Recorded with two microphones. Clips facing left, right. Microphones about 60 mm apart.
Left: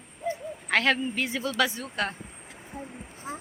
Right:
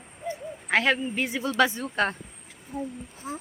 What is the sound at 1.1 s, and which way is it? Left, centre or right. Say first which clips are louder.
Speech: right 2 dB; right.